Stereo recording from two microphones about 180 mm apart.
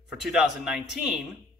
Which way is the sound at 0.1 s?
Centre (ahead or behind).